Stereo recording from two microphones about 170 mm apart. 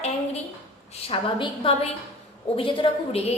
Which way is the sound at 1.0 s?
30° left (ahead or behind).